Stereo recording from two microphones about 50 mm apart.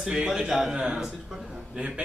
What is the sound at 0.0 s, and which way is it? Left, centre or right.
Speech, centre.